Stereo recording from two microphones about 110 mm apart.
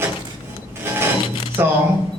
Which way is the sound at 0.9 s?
20° right (ahead or behind).